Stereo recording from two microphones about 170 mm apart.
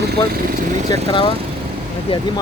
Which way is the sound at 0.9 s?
25° left (ahead or behind).